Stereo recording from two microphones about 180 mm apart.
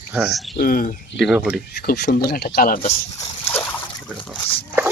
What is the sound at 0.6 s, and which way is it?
Speech, 50° left (ahead or behind).